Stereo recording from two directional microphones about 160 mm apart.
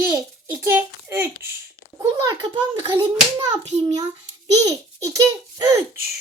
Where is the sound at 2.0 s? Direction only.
25° right (ahead or behind).